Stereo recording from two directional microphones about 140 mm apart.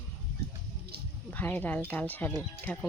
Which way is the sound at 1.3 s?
10° left (ahead or behind).